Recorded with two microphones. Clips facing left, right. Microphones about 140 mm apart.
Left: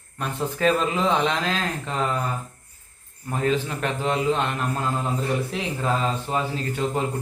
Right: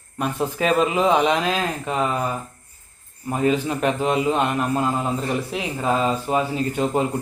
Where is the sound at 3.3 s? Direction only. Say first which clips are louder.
Right 3 dB; 15° right (ahead or behind).